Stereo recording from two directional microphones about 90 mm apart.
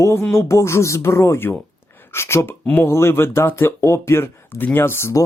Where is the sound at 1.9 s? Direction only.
25° left (ahead or behind).